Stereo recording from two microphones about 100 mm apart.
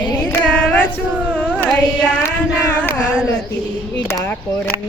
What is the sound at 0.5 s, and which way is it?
Female singing, 15° left (ahead or behind).